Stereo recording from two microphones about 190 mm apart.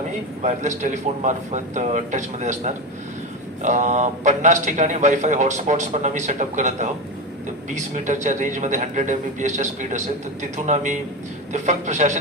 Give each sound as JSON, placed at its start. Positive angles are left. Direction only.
{"t": 0.4, "sound": "a man's voice", "side_deg": -40}
{"t": 3.6, "sound": "a man's voice", "side_deg": -40}
{"t": 11.5, "sound": "a man's voice", "side_deg": -40}